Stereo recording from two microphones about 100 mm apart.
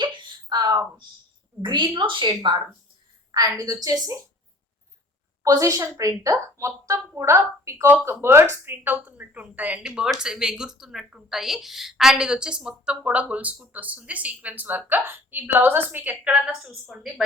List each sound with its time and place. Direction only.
0.0 s a sound: 50° right (ahead or behind)
1.6 s a woman's voice: 50° right (ahead or behind)
3.6 s a woman's voice: 35° right (ahead or behind)
5.4 s a woman's voice: 35° right (ahead or behind); by 16.4 s 15° right (ahead or behind)
16.9 s a woman's voice: 5° right (ahead or behind)